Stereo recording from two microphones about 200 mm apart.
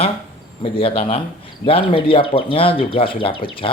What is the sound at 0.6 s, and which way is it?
Speech, 25° left (ahead or behind).